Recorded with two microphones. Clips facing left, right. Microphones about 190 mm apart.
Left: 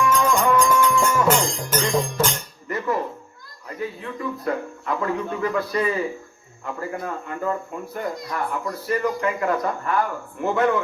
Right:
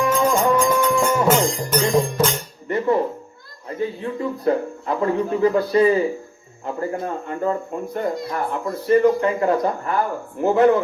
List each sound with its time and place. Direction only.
0.0 s music: 35° right (ahead or behind)
0.9 s music: 20° right (ahead or behind)
1.3 s music: centre (ahead or behind)
2.6 s dishes: 30° right (ahead or behind)
3.7 s speech: 30° right (ahead or behind)